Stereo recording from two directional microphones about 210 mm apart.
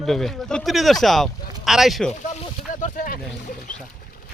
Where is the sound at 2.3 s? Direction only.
40° left (ahead or behind).